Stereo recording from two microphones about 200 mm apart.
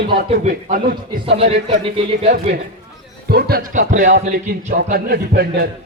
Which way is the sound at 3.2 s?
50° right (ahead or behind).